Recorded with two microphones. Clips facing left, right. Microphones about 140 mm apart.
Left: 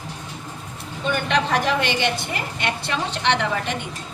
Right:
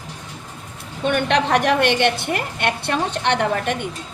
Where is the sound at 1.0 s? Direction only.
65° right (ahead or behind).